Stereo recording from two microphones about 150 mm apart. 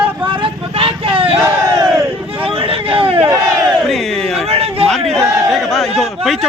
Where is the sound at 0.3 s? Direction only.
35° right (ahead or behind).